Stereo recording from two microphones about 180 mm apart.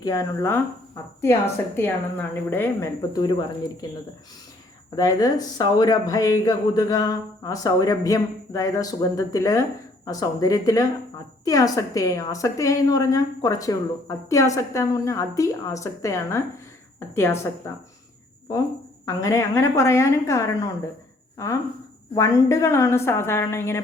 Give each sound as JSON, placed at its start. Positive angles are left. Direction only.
{"t": 0.0, "sound": "a woman's voice", "side_deg": 20}
{"t": 3.1, "sound": "a woman's voice", "side_deg": 25}
{"t": 4.9, "sound": "a woman's voice", "side_deg": 20}
{"t": 19.0, "sound": "a woman's voice", "side_deg": 20}